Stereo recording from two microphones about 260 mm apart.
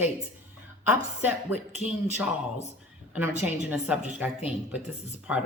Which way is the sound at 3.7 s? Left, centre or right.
Centre.